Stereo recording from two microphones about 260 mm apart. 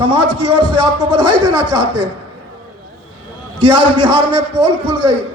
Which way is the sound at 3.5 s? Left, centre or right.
Right.